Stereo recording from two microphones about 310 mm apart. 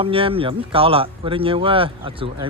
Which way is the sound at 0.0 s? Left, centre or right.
Centre.